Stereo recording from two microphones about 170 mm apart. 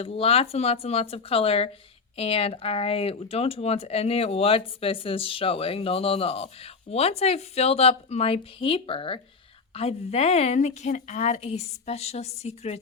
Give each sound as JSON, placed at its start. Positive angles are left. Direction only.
{"t": 0.0, "sound": "speech", "side_deg": 35}